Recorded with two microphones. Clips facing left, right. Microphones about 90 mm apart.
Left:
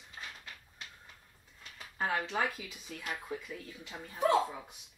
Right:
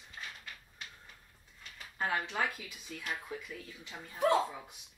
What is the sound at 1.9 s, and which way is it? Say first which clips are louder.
Speech: left 1 dB; 25° left (ahead or behind).